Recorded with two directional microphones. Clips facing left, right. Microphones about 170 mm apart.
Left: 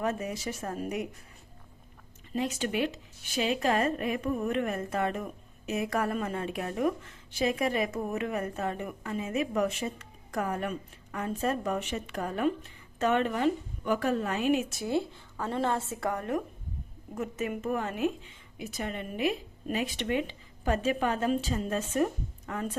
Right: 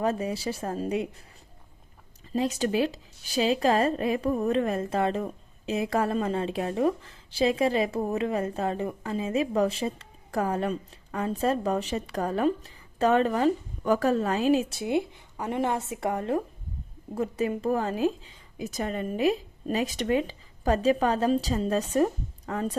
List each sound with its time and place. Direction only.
0.0 s a woman's voice: 30° right (ahead or behind)
2.3 s speech: 35° right (ahead or behind)
14.8 s a woman's voice: 20° right (ahead or behind); by 22.8 s 35° right (ahead or behind)